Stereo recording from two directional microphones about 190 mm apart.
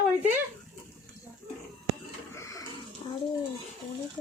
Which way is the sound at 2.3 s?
15° left (ahead or behind).